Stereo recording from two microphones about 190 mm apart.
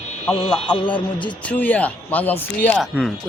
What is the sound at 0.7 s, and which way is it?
Speech, 25° left (ahead or behind).